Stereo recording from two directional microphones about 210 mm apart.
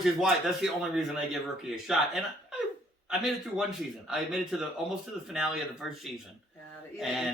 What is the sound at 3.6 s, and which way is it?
Speech, centre (ahead or behind).